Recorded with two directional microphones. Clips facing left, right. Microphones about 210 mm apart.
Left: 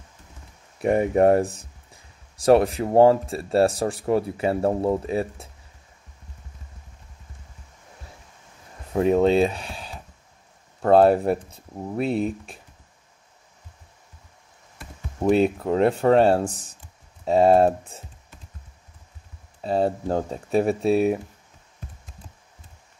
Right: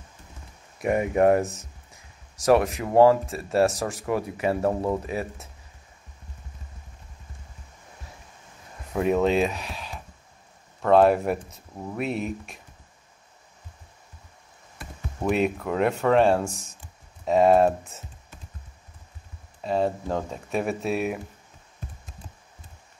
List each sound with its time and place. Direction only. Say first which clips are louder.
0.7 s speech: left 3 dB; 35° left (ahead or behind)
8.9 s speech: left 4 dB; 30° left (ahead or behind)
15.2 s speech: left 5 dB; 30° left (ahead or behind)
19.6 s speech: left 2 dB; 35° left (ahead or behind)